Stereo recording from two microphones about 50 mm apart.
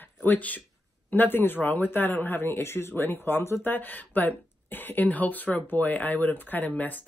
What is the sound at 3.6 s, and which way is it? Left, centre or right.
Speech, left.